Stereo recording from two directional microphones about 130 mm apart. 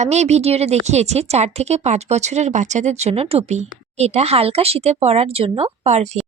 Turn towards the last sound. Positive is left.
turn(degrees=-60)  # may be behind; listen again after turning